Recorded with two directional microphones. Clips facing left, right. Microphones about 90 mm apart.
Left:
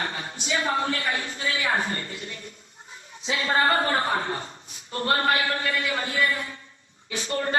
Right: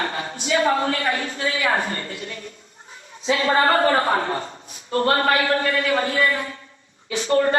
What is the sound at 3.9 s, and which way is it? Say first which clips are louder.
A woman's voice: right 5 dB; 55° right (ahead or behind).